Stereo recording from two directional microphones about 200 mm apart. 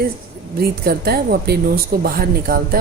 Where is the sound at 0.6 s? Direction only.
50° right (ahead or behind).